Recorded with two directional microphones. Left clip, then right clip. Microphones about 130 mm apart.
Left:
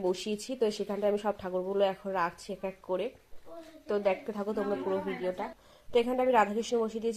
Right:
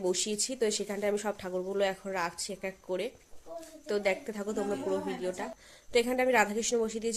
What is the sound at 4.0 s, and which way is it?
Speech, 10° right (ahead or behind).